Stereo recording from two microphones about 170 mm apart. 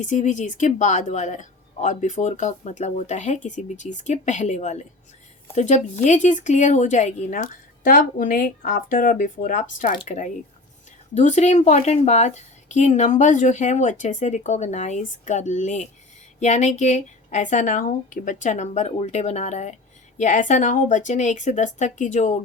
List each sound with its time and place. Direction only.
0.0 s speech: 45° left (ahead or behind)